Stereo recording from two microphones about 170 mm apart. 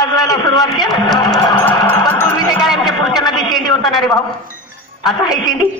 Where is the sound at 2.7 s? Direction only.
25° left (ahead or behind).